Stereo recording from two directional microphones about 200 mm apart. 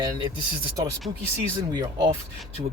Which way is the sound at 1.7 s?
20° right (ahead or behind).